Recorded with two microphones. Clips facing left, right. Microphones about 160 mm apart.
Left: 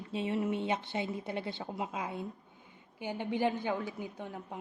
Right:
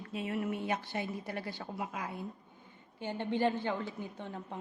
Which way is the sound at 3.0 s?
10° left (ahead or behind).